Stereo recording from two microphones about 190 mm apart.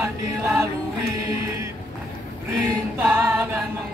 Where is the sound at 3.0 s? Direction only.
10° right (ahead or behind).